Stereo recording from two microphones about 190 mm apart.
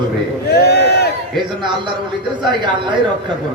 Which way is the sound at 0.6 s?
60° left (ahead or behind).